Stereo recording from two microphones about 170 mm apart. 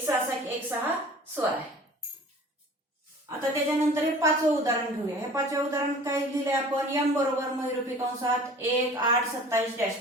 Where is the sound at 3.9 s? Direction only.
20° right (ahead or behind).